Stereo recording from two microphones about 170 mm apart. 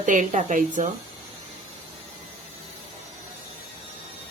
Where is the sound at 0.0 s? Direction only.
50° right (ahead or behind).